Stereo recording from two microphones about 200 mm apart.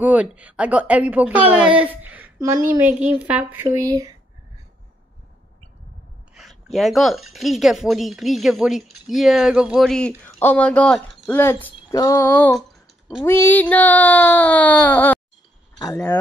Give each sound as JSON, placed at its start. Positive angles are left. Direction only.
{"t": 0.0, "sound": "a woman's voice", "side_deg": -5}
{"t": 6.3, "sound": "speech", "side_deg": 0}
{"t": 13.2, "sound": "speech", "side_deg": 10}